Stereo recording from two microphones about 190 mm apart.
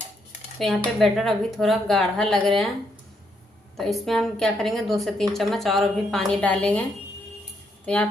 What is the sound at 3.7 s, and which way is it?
A woman's voice, centre (ahead or behind).